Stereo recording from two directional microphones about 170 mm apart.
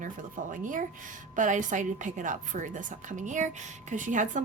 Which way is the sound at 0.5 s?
50° right (ahead or behind).